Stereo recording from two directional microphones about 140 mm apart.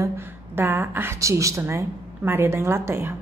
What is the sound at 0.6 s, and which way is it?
A woman's voice, 15° right (ahead or behind).